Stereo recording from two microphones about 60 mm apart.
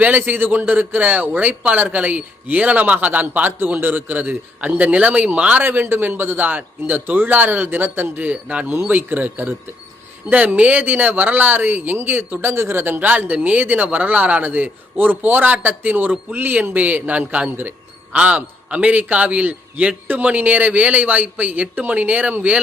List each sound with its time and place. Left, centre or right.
0.0 s a man's voice: right
17.6 s a sound: right
18.2 s speech: right